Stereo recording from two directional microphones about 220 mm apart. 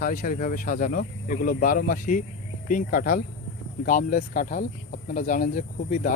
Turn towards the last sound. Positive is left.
turn(degrees=40)  # may be behind; listen again after turning